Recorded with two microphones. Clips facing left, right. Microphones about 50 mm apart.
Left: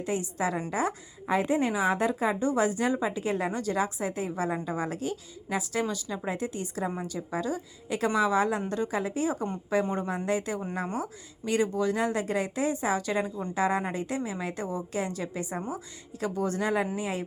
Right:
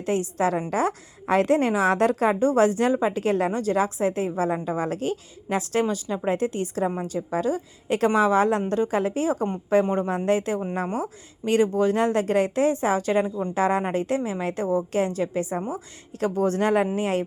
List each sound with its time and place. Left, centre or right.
0.0 s a woman's voice: right
1.3 s a woman's voice: right
2.3 s a woman's voice: right
3.5 s a woman's voice: right
5.8 s a woman's voice: right
16.2 s a woman's voice: right